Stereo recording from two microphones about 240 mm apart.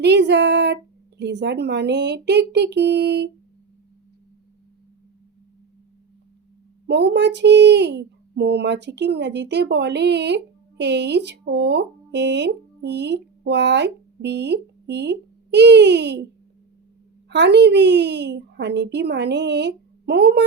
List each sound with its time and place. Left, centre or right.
0.0 s a woman's voice: right
6.8 s speech: right
17.2 s a woman's voice: right